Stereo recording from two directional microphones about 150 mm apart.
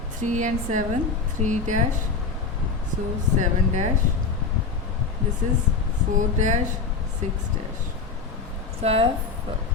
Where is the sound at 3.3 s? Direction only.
55° right (ahead or behind).